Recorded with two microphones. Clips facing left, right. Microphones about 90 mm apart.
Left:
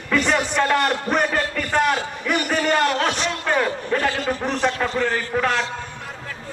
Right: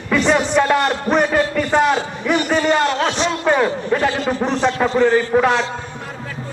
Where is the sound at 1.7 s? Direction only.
20° right (ahead or behind).